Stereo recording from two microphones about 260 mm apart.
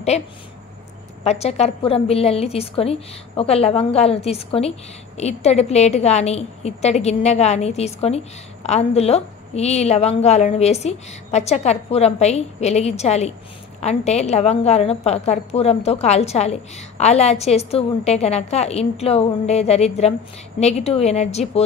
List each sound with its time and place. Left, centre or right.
1.2 s a woman's voice: left